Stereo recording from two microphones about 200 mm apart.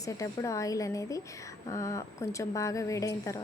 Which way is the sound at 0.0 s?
15° left (ahead or behind).